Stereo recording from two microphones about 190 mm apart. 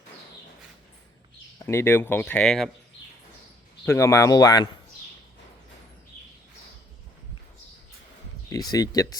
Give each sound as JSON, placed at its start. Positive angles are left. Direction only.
{"t": 1.6, "sound": "speech", "side_deg": 10}
{"t": 3.8, "sound": "speech", "side_deg": 15}
{"t": 8.4, "sound": "speech", "side_deg": 20}